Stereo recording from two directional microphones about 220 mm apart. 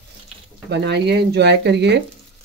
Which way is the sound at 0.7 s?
50° right (ahead or behind).